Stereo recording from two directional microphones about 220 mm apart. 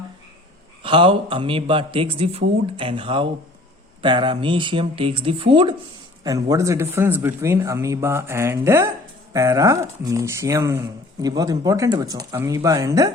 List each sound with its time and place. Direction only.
0.8 s speech: 25° right (ahead or behind)